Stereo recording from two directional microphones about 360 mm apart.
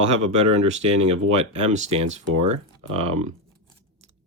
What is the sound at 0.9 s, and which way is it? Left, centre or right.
Speech, right.